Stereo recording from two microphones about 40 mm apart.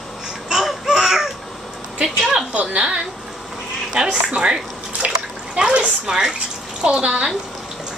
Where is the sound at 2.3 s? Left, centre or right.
Right.